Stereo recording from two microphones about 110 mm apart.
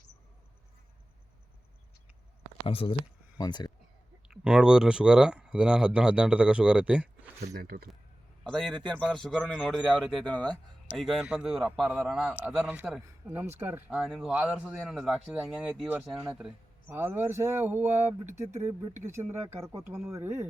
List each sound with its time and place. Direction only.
2.6 s speech: 55° left (ahead or behind)
3.3 s speech: 35° left (ahead or behind)
4.3 s speech: 5° right (ahead or behind)
8.4 s a man's voice: 5° left (ahead or behind)
12.3 s speech: 15° right (ahead or behind)
13.2 s speech: 25° right (ahead or behind)
13.9 s a man's voice: centre (ahead or behind); by 20.5 s 25° right (ahead or behind)